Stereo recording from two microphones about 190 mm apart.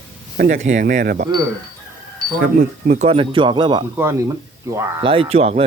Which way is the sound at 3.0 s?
25° right (ahead or behind).